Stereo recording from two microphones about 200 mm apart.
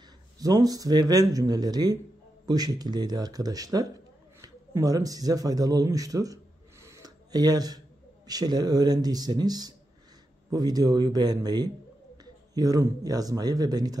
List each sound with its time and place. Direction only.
0.4 s speech: 20° right (ahead or behind)